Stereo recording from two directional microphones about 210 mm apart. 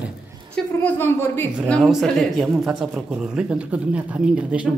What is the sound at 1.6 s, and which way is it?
Speech, 5° left (ahead or behind).